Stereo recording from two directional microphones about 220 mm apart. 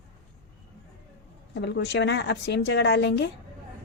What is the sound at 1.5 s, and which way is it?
Speech, 50° left (ahead or behind).